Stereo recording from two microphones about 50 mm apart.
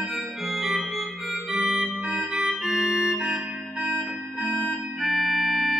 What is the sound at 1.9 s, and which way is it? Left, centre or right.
Music, right.